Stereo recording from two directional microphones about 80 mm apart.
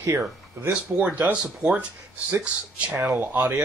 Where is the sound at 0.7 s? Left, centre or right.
Centre.